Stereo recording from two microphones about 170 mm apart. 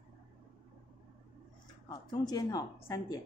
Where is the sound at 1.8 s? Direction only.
25° left (ahead or behind).